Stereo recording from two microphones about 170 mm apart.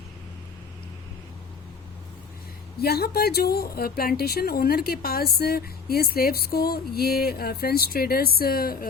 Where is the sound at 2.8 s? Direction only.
65° left (ahead or behind).